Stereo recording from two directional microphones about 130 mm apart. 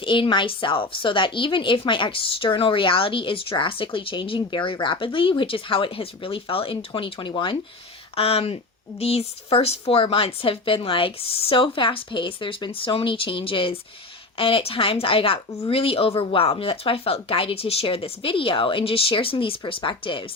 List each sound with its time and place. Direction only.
0.0 s speech: 40° left (ahead or behind)
8.1 s speech: 50° left (ahead or behind)